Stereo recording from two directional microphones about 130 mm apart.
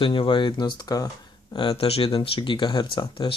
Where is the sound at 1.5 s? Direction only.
40° left (ahead or behind).